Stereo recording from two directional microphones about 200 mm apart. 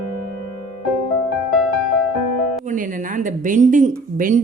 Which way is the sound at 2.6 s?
40° right (ahead or behind).